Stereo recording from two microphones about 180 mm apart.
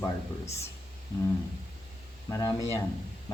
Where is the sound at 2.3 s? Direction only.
20° left (ahead or behind).